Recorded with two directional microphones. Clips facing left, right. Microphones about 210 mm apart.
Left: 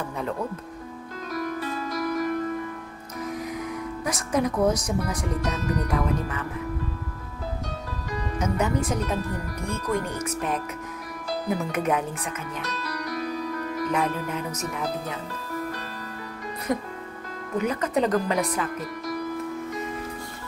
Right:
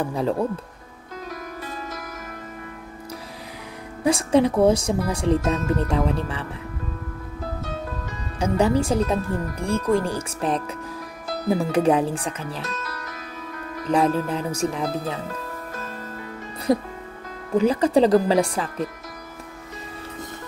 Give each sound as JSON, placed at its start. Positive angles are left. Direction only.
{"t": 0.1, "sound": "speech", "side_deg": -35}
{"t": 4.0, "sound": "speech", "side_deg": -30}
{"t": 8.4, "sound": "speech", "side_deg": -30}
{"t": 13.8, "sound": "speech", "side_deg": -30}
{"t": 16.7, "sound": "speech", "side_deg": -35}